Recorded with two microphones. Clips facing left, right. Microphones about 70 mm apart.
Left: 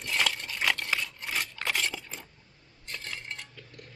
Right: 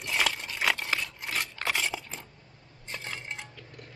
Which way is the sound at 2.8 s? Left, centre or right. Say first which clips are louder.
Right 1 dB; centre.